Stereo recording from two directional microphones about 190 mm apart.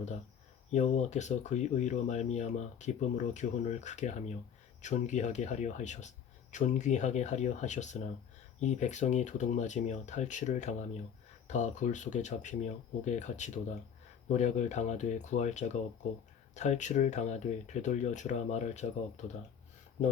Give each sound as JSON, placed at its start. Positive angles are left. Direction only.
{"t": 0.7, "sound": "speech", "side_deg": 35}